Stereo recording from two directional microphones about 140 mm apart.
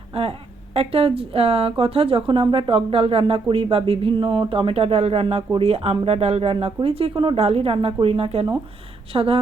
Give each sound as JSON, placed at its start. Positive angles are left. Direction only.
{"t": 0.2, "sound": "a woman's voice", "side_deg": -45}